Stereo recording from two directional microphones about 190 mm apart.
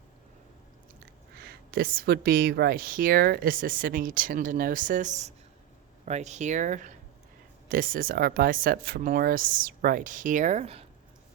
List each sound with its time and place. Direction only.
1.4 s speech: 55° right (ahead or behind); by 10.8 s 35° right (ahead or behind)